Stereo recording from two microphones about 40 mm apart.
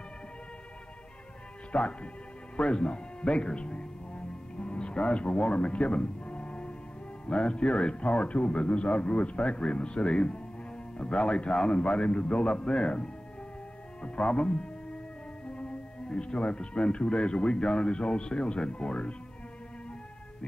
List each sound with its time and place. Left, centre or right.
1.7 s speech: left
2.5 s music: left
7.2 s a man's voice: left
15.4 s music: left
16.1 s a man's voice: left